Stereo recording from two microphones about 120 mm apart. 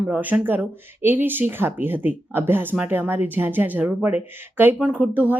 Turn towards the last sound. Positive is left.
turn(degrees=-15)  # may be behind; listen again after turning